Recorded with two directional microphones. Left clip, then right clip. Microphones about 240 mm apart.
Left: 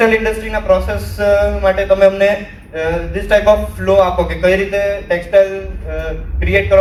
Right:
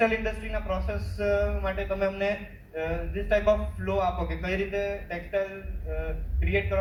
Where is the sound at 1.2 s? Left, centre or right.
Left.